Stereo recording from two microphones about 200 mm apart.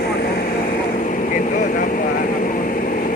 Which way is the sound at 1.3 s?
40° left (ahead or behind).